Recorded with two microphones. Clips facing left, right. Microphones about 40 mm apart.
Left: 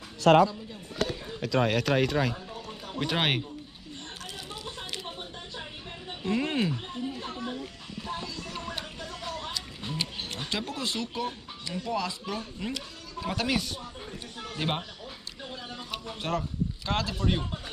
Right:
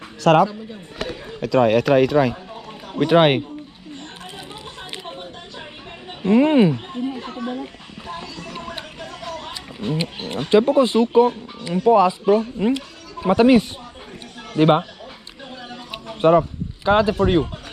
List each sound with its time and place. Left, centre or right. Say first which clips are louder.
0.2 s a man's voice: right 5 dB; right
1.4 s speech: right 10 dB; centre
6.2 s speech: right 14 dB; right
6.7 s speech: right 9 dB; right
8.1 s music: right 4 dB; right
9.0 s a sound: right 7 dB; right
9.9 s speech: right 9 dB; right
16.2 s speech: right 16 dB; right